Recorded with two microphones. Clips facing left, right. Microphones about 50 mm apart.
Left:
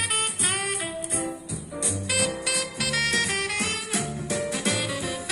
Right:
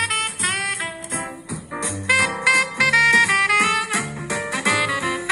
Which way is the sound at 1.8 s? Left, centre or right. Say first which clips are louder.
Right 9 dB; right.